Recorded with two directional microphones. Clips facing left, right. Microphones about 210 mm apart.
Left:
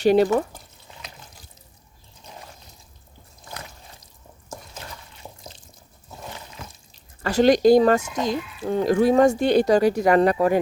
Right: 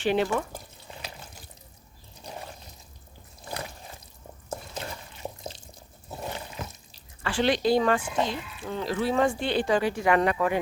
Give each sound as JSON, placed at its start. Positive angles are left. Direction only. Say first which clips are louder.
{"t": 0.0, "sound": "speech", "louder": "left 8 dB", "side_deg": 40}
{"t": 7.2, "sound": "speech", "louder": "left 8 dB", "side_deg": 40}